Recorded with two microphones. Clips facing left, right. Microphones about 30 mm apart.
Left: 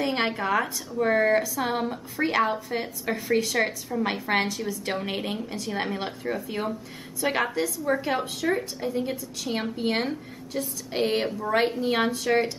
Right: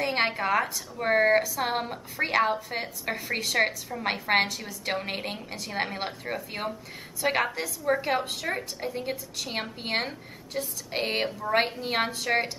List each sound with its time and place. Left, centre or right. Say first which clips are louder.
0.0 s a woman's voice: even; centre
1.0 s speech: even; right
1.4 s speech: left 1 dB; centre
1.7 s a woman's voice: left 2 dB; centre